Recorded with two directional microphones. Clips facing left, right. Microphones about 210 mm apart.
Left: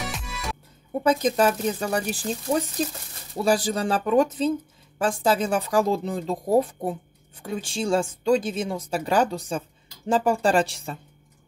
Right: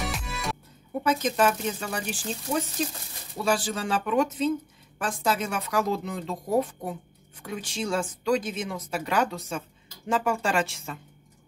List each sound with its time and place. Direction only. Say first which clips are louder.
0.0 s music: right 1 dB; centre (ahead or behind)
1.0 s speech: left 3 dB; 35° left (ahead or behind)